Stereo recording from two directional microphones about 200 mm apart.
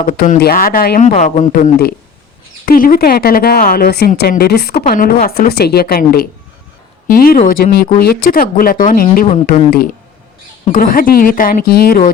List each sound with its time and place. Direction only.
0.1 s a woman's voice: 45° left (ahead or behind)
10.7 s a woman's voice: 45° left (ahead or behind)